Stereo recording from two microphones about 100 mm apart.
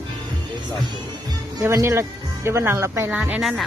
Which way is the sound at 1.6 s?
30° right (ahead or behind).